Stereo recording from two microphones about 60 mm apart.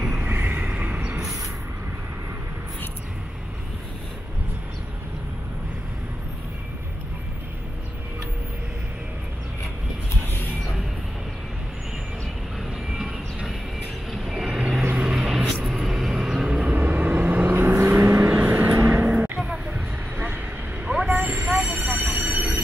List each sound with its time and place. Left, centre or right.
0.2 s vehicle: right
12.5 s vehicle: centre
16.5 s vehicle: right
18.9 s a sound: right
19.4 s a sound: centre
21.1 s vehicle: right